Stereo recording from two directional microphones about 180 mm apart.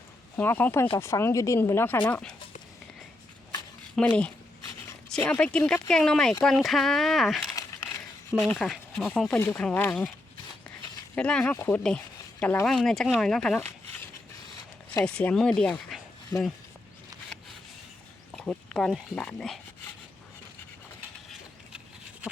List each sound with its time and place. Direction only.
0.3 s speech: 10° left (ahead or behind)
3.9 s speech: 5° left (ahead or behind)
11.1 s speech: 5° left (ahead or behind)
11.5 s speech: 15° left (ahead or behind)
11.8 s speech: 5° left (ahead or behind)
15.0 s speech: 5° left (ahead or behind)
16.3 s speech: 25° right (ahead or behind)
18.3 s speech: 5° left (ahead or behind)